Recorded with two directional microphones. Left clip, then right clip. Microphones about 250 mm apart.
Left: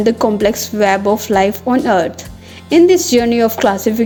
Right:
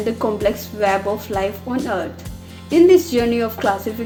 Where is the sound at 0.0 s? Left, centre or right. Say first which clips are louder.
Left 6 dB; left.